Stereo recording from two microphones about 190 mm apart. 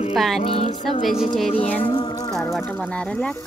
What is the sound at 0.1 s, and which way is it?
Music, centre (ahead or behind).